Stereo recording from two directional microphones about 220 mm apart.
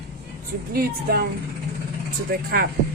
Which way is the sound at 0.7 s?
40° right (ahead or behind).